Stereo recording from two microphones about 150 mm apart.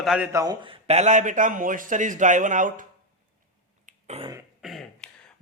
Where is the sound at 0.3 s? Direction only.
30° right (ahead or behind); by 2.8 s 60° right (ahead or behind).